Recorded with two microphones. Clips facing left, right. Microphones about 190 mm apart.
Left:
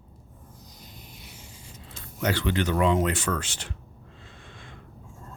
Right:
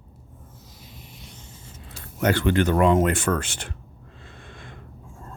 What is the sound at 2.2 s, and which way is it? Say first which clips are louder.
Speech: right 5 dB; 50° right (ahead or behind).